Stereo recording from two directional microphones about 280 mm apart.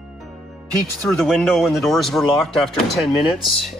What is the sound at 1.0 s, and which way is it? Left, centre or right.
Speech, centre.